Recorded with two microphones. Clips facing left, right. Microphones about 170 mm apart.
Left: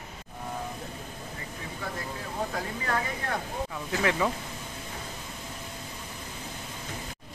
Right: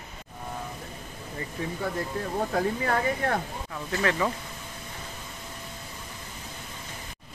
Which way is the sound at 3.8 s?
15° left (ahead or behind).